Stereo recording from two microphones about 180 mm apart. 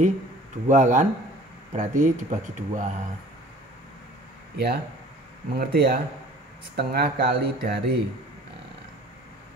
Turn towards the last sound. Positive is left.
turn(degrees=-60)  # may be behind; listen again after turning